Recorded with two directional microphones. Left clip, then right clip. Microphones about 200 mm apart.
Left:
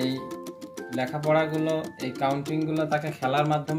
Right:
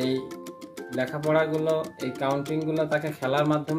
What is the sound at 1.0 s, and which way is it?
Speech, 25° right (ahead or behind).